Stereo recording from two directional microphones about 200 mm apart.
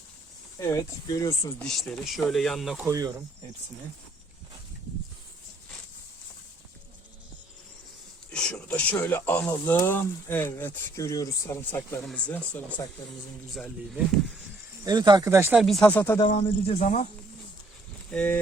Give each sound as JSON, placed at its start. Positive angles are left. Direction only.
{"t": 0.6, "sound": "speech", "side_deg": 15}
{"t": 1.6, "sound": "speech", "side_deg": 0}
{"t": 2.8, "sound": "speech", "side_deg": -15}
{"t": 8.3, "sound": "speech", "side_deg": 5}
{"t": 14.8, "sound": "speech", "side_deg": -20}
{"t": 15.6, "sound": "speech", "side_deg": 5}
{"t": 16.4, "sound": "speech", "side_deg": 35}
{"t": 18.1, "sound": "speech", "side_deg": 5}